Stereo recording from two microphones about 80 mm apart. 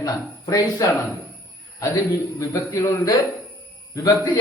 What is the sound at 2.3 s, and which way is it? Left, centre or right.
Speech, left.